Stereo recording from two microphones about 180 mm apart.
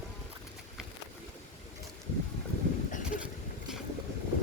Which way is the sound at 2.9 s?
45° left (ahead or behind).